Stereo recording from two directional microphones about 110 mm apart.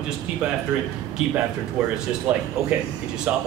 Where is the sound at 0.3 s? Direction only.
10° right (ahead or behind).